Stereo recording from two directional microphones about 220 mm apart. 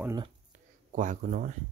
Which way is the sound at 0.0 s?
15° right (ahead or behind).